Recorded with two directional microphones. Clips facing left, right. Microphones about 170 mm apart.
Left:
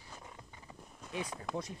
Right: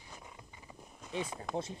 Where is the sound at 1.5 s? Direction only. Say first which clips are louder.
Right 3 dB; 25° right (ahead or behind).